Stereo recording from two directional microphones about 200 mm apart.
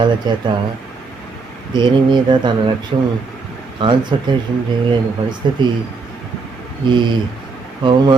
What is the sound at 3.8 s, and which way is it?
Speech, 25° right (ahead or behind).